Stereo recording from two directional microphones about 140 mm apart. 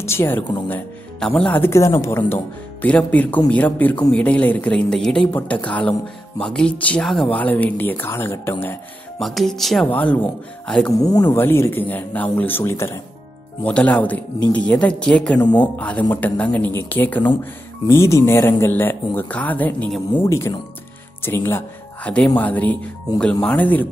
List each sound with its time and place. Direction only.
0.0 s speech: 20° left (ahead or behind)
9.2 s speech: centre (ahead or behind)
11.0 s speech: 25° left (ahead or behind)
11.3 s speech: 15° left (ahead or behind)